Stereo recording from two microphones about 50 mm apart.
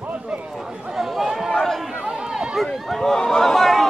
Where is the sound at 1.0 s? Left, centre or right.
Centre.